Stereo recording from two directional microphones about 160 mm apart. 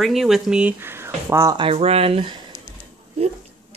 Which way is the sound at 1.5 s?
35° right (ahead or behind).